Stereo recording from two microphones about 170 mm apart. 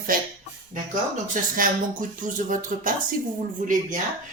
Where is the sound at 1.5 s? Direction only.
50° right (ahead or behind).